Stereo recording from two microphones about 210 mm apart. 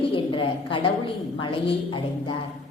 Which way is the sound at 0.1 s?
25° left (ahead or behind).